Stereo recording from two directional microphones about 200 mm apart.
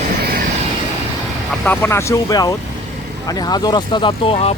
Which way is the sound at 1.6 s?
10° left (ahead or behind).